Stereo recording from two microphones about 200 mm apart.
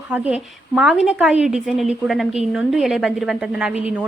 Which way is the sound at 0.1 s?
5° right (ahead or behind).